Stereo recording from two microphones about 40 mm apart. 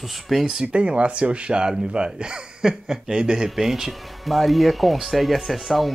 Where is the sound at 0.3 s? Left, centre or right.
Centre.